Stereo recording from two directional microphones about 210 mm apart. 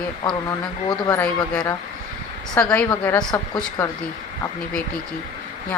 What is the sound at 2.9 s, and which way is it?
Speech, 20° left (ahead or behind).